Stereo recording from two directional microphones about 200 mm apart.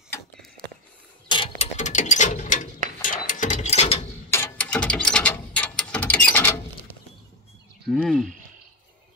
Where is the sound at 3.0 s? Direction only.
40° left (ahead or behind).